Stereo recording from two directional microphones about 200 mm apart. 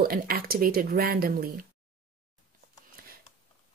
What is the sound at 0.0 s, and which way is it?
A woman's voice, 50° right (ahead or behind).